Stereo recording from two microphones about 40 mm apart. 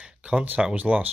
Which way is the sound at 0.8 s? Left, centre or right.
Right.